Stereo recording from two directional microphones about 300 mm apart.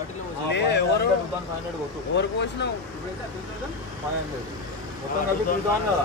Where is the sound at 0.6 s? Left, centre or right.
Left.